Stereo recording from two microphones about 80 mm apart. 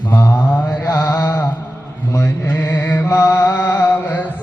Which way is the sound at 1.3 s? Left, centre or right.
Left.